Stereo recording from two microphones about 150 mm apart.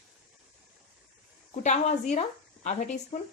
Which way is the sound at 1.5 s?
50° left (ahead or behind).